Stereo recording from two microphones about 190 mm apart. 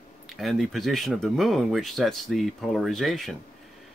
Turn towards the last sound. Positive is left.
turn(degrees=0)  # may be behind; listen again after turning